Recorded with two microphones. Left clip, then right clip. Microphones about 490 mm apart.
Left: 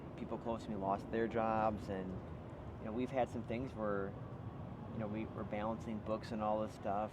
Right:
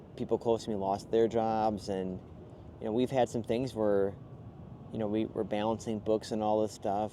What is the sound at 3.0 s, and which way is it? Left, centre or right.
Speech, right.